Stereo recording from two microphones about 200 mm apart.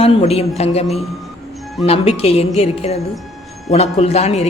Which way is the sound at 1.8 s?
30° left (ahead or behind).